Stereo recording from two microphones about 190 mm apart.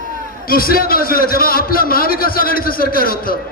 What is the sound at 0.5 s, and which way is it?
A man's voice, 50° left (ahead or behind).